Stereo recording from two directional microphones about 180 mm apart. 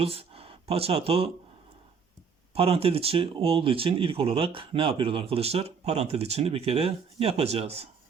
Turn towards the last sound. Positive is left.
turn(degrees=-35)  # may be behind; listen again after turning